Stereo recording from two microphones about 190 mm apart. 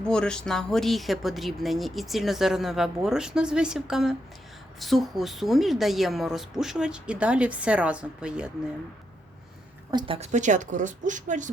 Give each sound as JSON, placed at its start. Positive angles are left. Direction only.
{"t": 0.0, "sound": "speech", "side_deg": 5}
{"t": 9.9, "sound": "a woman's voice", "side_deg": -25}
{"t": 10.2, "sound": "speech", "side_deg": -40}